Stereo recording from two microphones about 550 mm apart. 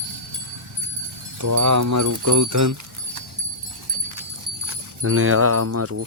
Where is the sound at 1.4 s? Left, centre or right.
Right.